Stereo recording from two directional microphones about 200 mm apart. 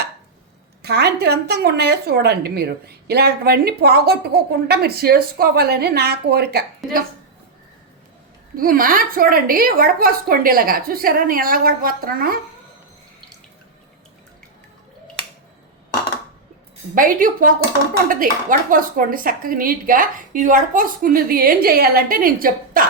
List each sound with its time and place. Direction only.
0.8 s a woman's voice: 55° right (ahead or behind)
8.5 s a woman's voice: 45° right (ahead or behind)
16.9 s a woman's voice: 45° right (ahead or behind)